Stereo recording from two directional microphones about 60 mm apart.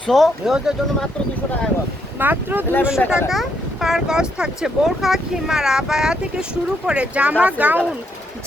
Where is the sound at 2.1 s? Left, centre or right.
Right.